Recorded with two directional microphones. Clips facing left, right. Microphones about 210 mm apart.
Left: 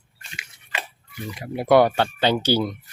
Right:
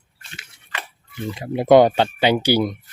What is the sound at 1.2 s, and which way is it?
Speech, 25° right (ahead or behind).